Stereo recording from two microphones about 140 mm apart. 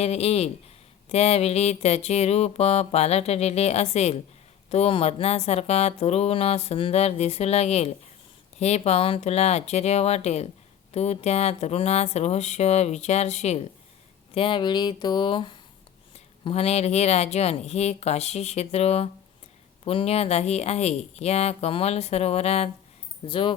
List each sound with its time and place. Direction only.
0.0 s speech: 50° left (ahead or behind)
14.3 s speech: 35° left (ahead or behind)
23.2 s speech: 40° left (ahead or behind)